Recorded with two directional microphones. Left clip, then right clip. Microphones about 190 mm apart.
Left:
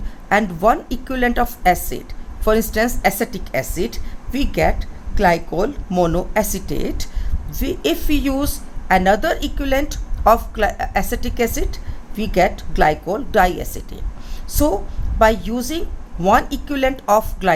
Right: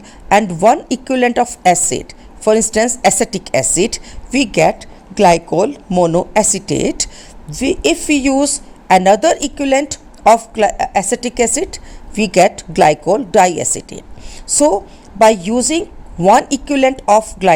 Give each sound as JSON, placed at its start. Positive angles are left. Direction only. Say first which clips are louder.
{"t": 0.3, "sound": "a woman's voice", "louder": "right 5 dB", "side_deg": -35}